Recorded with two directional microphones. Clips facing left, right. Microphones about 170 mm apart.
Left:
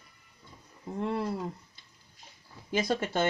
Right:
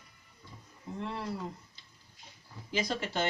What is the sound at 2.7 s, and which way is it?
Speech, 50° left (ahead or behind).